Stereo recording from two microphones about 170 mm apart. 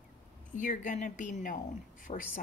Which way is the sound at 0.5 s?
50° left (ahead or behind).